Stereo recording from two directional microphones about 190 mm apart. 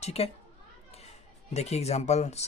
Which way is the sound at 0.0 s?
35° left (ahead or behind).